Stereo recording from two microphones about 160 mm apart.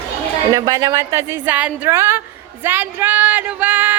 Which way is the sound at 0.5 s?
20° right (ahead or behind).